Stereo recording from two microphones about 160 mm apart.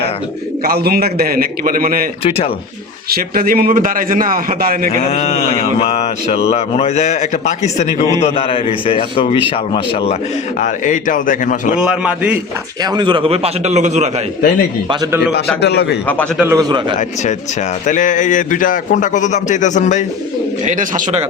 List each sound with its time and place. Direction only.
0.6 s a man's voice: 70° right (ahead or behind)
3.1 s a man's voice: 70° right (ahead or behind)
5.0 s speech: 35° left (ahead or behind)
10.6 s a man's voice: 55° left (ahead or behind)
11.7 s a man's voice: 5° right (ahead or behind)
12.8 s a man's voice: 25° right (ahead or behind); by 14.1 s 45° right (ahead or behind)
15.6 s a man's voice: 90° left
16.4 s a man's voice: 20° right (ahead or behind)
17.8 s a man's voice: 55° left (ahead or behind)
20.7 s a man's voice: 55° right (ahead or behind)